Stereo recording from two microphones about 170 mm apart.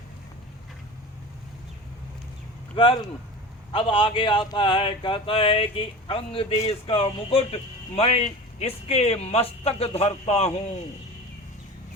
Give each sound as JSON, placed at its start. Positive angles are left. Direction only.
{"t": 3.7, "sound": "speech", "side_deg": 30}